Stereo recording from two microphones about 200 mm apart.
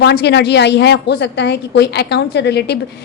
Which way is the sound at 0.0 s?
55° left (ahead or behind).